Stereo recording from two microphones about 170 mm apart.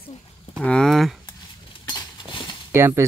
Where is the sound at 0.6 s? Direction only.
5° left (ahead or behind).